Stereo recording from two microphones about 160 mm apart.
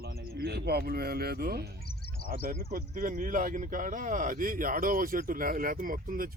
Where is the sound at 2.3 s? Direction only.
60° right (ahead or behind).